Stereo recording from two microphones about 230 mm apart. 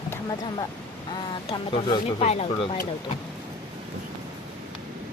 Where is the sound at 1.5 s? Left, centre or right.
Centre.